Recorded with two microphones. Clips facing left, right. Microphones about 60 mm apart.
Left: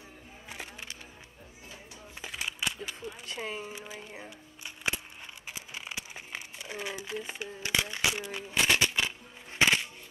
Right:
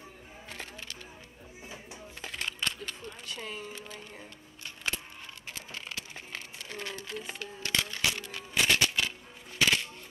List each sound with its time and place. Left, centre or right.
0.5 s music: centre
2.2 s a sound: centre
3.3 s speech: centre
5.5 s crumpling: centre